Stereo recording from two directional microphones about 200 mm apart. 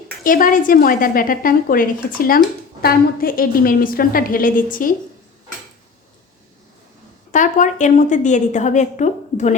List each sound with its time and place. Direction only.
0.3 s speech: 45° left (ahead or behind)
7.3 s a woman's voice: 40° left (ahead or behind)